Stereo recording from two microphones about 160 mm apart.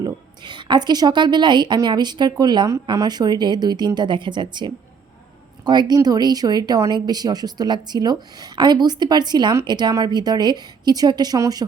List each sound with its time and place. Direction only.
0.0 s speech: 30° right (ahead or behind)